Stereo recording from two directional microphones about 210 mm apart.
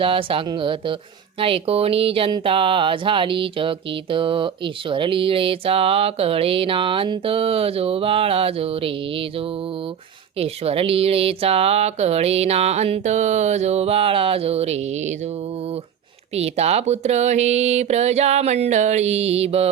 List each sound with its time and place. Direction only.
0.0 s speech: 25° right (ahead or behind)
10.4 s speech: 30° right (ahead or behind)
16.3 s speech: 30° right (ahead or behind)